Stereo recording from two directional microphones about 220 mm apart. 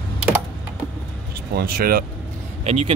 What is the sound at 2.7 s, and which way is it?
Speech, 30° right (ahead or behind).